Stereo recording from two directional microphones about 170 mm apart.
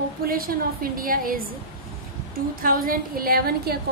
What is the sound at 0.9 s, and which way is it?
Speech, 55° right (ahead or behind).